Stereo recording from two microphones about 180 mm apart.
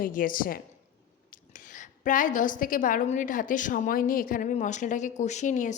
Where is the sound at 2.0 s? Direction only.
45° left (ahead or behind).